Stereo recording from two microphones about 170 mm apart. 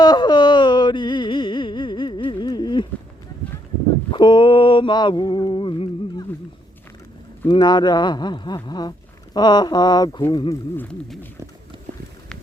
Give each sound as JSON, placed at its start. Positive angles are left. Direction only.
{"t": 0.0, "sound": "music", "side_deg": 25}
{"t": 4.1, "sound": "mantra", "side_deg": 30}
{"t": 7.4, "sound": "mantra", "side_deg": 25}
{"t": 10.8, "sound": "speech", "side_deg": 10}